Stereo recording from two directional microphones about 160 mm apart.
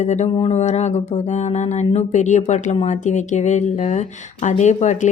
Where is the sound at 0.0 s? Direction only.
45° left (ahead or behind).